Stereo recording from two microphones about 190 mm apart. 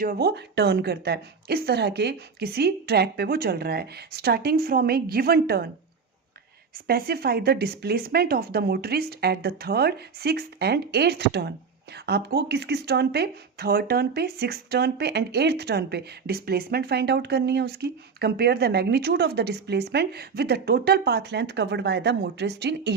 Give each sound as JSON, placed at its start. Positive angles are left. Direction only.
{"t": 0.0, "sound": "speech", "side_deg": -55}
{"t": 6.7, "sound": "speech", "side_deg": -55}